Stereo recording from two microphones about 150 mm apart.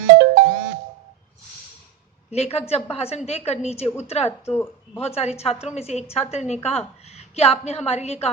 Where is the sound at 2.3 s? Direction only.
45° left (ahead or behind).